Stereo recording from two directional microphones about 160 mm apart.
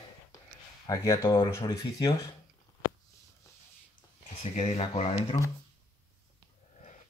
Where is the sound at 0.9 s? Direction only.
20° left (ahead or behind).